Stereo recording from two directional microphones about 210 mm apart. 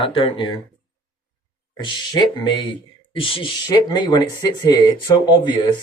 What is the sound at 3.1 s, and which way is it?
Speech, 25° left (ahead or behind).